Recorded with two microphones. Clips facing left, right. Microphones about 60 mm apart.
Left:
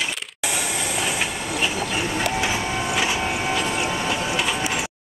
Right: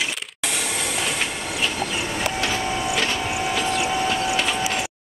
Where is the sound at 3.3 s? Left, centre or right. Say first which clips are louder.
Even; centre.